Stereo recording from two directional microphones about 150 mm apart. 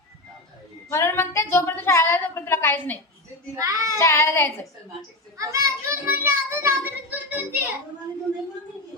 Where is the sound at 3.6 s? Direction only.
20° right (ahead or behind).